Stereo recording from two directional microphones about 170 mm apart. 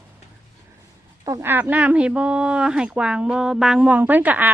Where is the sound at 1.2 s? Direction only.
15° right (ahead or behind).